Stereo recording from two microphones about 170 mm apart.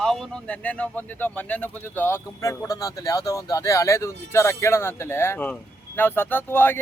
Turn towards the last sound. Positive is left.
turn(degrees=10)  # may be behind; listen again after turning